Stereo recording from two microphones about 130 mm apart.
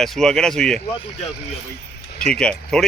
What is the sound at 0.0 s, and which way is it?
Speech, centre (ahead or behind).